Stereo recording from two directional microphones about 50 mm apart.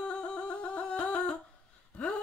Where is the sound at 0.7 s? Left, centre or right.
Left.